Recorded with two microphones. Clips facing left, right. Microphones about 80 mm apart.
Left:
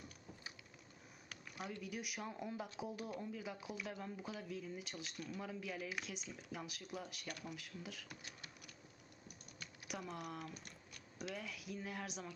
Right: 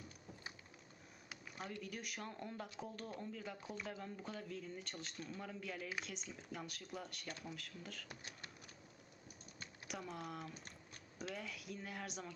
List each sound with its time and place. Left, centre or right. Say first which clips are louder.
1.8 s speech: left 2 dB; centre
8.2 s a sound: right 1 dB; right
9.8 s speech: left 1 dB; centre